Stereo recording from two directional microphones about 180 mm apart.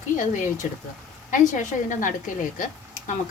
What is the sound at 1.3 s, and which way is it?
A woman's voice, 45° left (ahead or behind).